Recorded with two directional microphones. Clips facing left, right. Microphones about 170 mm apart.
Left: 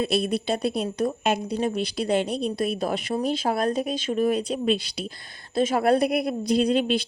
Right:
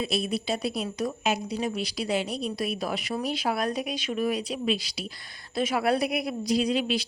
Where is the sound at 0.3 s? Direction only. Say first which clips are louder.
Left 4 dB; 55° left (ahead or behind).